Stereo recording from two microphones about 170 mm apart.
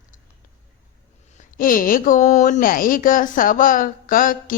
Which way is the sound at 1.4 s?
55° left (ahead or behind).